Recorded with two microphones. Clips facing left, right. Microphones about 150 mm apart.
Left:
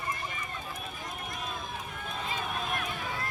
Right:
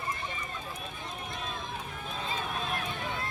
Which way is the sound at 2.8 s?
30° right (ahead or behind).